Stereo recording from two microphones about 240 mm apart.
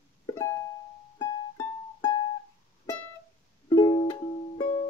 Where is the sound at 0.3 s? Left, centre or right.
Centre.